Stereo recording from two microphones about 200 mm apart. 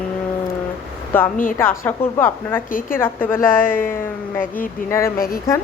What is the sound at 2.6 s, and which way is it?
Speech, 45° left (ahead or behind).